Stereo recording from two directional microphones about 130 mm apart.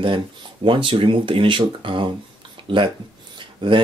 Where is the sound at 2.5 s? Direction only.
40° right (ahead or behind).